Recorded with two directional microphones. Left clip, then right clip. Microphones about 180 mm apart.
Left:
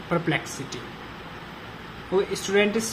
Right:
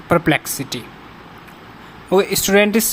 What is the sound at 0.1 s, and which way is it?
Speech, 60° right (ahead or behind).